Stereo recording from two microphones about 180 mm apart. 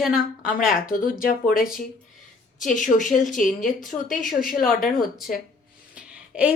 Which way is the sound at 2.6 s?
45° left (ahead or behind).